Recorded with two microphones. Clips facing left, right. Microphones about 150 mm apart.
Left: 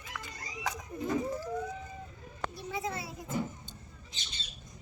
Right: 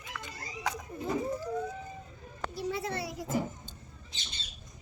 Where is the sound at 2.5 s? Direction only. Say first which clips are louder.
Right 5 dB; 70° right (ahead or behind).